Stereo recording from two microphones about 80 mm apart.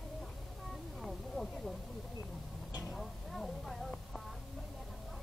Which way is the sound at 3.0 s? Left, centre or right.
Centre.